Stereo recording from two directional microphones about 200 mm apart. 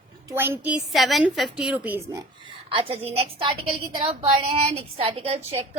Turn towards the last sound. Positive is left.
turn(degrees=-30)  # may be behind; listen again after turning